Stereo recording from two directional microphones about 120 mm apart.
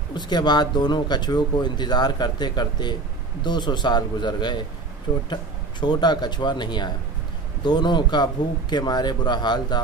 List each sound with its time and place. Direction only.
0.1 s speech: 40° left (ahead or behind)